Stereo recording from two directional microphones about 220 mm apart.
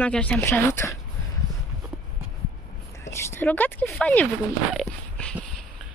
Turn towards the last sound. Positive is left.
turn(degrees=0)  # may be behind; listen again after turning